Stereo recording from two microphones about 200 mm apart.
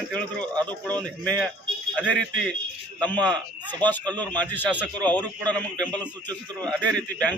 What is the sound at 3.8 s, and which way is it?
Speech, 10° left (ahead or behind).